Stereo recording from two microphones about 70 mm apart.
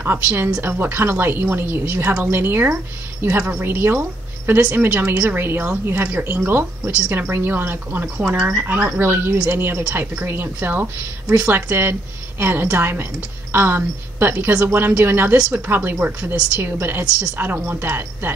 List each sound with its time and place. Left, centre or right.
0.0 s a woman's voice: right
6.8 s a woman's voice: centre
7.1 s a woman's voice: right
8.2 s a woman's voice: centre
8.9 s a woman's voice: right; by 17.4 s centre
17.4 s speech: right